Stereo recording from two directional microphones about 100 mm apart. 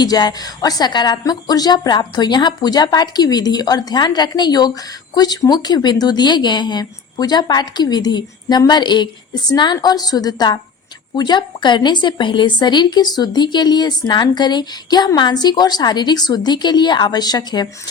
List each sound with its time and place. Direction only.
0.0 s a woman's voice: 45° left (ahead or behind)